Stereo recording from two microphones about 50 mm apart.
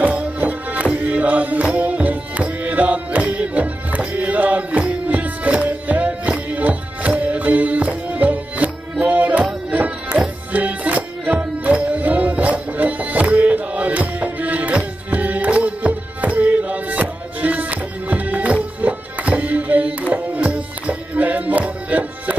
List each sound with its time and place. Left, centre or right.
0.0 s music: right